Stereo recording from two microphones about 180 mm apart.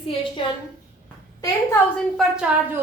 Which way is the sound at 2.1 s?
5° right (ahead or behind).